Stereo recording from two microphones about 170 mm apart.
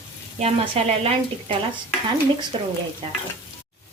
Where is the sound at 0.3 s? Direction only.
35° right (ahead or behind).